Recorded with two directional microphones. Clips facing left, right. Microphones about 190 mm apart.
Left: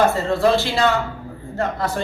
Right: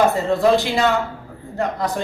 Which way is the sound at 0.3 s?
15° right (ahead or behind).